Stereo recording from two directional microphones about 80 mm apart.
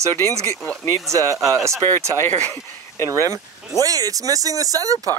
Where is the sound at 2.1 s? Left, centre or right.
Left.